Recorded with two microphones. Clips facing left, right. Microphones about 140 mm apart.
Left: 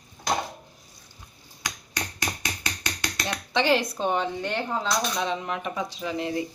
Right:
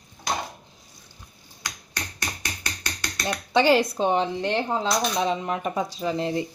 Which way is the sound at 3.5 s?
30° right (ahead or behind).